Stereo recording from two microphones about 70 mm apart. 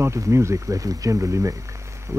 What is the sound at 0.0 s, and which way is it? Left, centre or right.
Speech, right.